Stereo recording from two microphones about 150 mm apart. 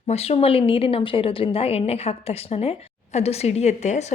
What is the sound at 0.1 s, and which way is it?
A woman's voice, 40° left (ahead or behind).